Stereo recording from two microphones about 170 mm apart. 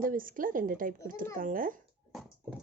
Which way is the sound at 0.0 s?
55° right (ahead or behind).